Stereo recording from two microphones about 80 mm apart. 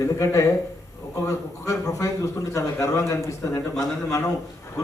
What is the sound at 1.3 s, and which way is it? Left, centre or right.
A man's voice, left.